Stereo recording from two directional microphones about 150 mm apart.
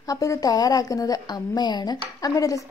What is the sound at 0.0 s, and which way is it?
A woman's voice, 25° left (ahead or behind).